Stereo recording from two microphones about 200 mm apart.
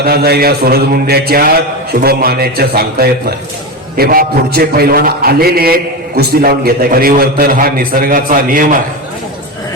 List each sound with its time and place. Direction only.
0.0 s a man's voice: 50° right (ahead or behind)